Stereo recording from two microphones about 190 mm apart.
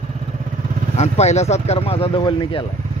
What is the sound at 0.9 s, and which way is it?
Speech, 35° left (ahead or behind).